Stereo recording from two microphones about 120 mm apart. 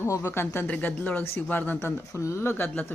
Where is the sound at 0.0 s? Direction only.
25° left (ahead or behind).